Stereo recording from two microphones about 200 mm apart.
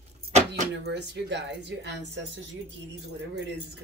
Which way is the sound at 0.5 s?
60° right (ahead or behind).